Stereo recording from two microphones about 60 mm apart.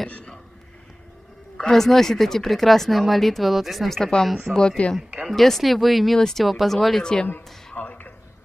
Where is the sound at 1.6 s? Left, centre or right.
Centre.